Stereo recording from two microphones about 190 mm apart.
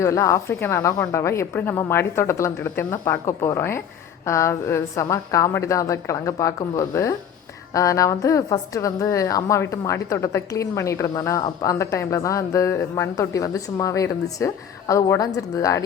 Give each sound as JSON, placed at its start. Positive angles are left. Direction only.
{"t": 0.0, "sound": "a woman's voice", "side_deg": 15}